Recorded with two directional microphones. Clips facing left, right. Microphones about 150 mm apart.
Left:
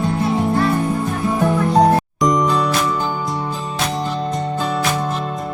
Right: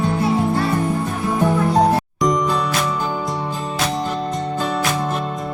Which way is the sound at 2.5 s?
Centre (ahead or behind).